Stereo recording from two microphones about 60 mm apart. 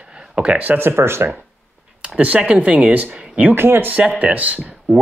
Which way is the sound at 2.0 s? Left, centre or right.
Right.